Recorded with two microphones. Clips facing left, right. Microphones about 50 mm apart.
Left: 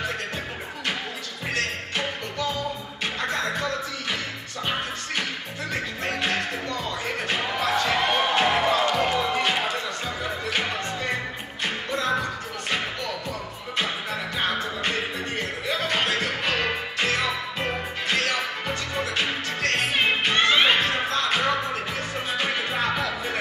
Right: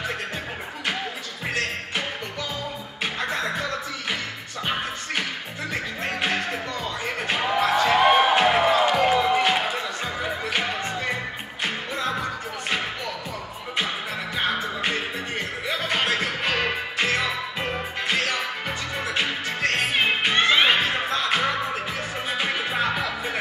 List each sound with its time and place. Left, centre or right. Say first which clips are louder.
6.0 s music: right 1 dB; centre
14.3 s music: right 2 dB; centre